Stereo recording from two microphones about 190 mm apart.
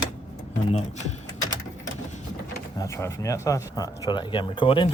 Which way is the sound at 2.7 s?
15° left (ahead or behind).